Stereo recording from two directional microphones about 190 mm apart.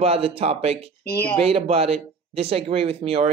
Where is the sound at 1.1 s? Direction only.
15° left (ahead or behind).